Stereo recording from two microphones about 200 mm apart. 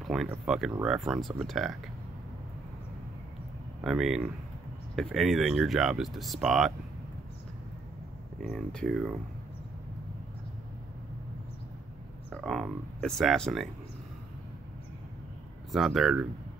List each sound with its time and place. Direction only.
0.0 s speech: centre (ahead or behind)
3.8 s speech: centre (ahead or behind)
8.4 s speech: centre (ahead or behind)
12.3 s speech: centre (ahead or behind)
15.7 s speech: centre (ahead or behind)